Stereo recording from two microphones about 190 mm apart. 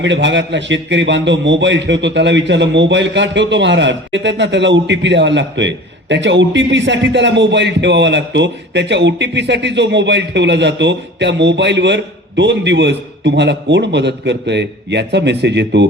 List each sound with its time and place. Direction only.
0.0 s a man's voice: 70° right (ahead or behind)